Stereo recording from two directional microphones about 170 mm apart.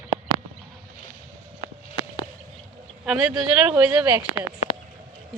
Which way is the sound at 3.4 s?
5° right (ahead or behind).